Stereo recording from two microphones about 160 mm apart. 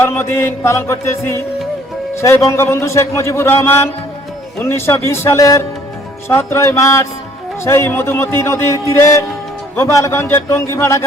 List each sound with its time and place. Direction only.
0.0 s a man's voice: 15° left (ahead or behind)